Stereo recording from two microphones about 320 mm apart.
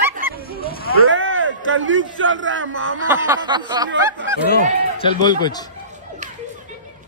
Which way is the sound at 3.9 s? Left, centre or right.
Right.